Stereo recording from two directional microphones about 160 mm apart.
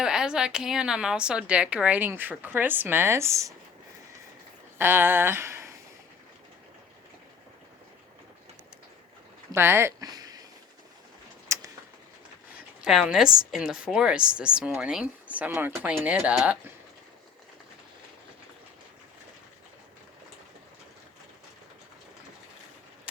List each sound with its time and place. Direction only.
0.0 s a woman's voice: 5° right (ahead or behind)
4.8 s speech: 15° right (ahead or behind)
9.5 s speech: 15° right (ahead or behind)
11.4 s a sound: 20° right (ahead or behind)
12.5 s a woman's voice: 5° right (ahead or behind)